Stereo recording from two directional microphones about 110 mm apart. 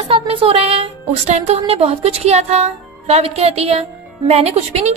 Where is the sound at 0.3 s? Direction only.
60° right (ahead or behind).